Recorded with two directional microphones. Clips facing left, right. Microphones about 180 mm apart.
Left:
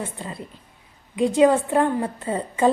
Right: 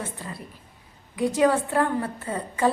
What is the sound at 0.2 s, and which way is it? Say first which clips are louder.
A woman's voice: left 3 dB; 20° left (ahead or behind).